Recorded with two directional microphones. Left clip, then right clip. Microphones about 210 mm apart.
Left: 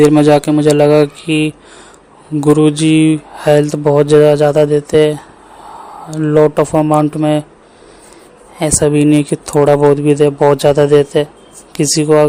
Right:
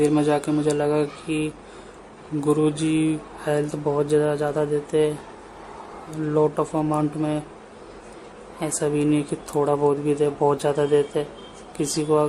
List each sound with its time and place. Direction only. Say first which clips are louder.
0.0 s speech: left 12 dB; 40° left (ahead or behind)
8.5 s speech: left 12 dB; 40° left (ahead or behind)